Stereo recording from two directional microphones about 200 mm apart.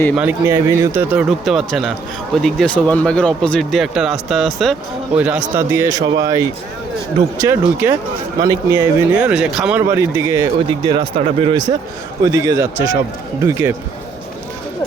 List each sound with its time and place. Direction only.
0.2 s speech: 10° right (ahead or behind)
9.9 s speech: 15° right (ahead or behind)
10.7 s speech: 25° right (ahead or behind)